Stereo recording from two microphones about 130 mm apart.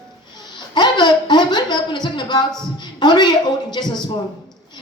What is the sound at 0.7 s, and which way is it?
A woman's voice, 35° left (ahead or behind).